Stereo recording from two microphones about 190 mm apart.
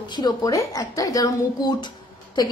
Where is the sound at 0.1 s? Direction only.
20° left (ahead or behind).